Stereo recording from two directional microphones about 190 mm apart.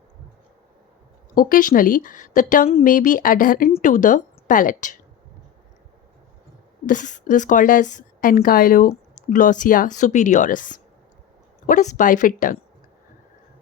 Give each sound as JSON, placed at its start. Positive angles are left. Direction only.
{"t": 1.4, "sound": "a woman's voice", "side_deg": 45}
{"t": 6.8, "sound": "a woman's voice", "side_deg": 40}